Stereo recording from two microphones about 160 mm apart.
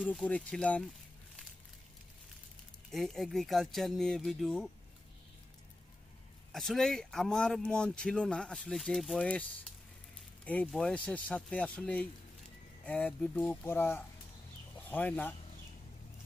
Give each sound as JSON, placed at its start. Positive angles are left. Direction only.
{"t": 0.0, "sound": "speech", "side_deg": 10}
{"t": 2.9, "sound": "speech", "side_deg": 0}
{"t": 6.5, "sound": "speech", "side_deg": 0}